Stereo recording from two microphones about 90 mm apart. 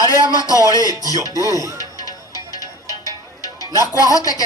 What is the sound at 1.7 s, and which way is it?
Music, 45° left (ahead or behind).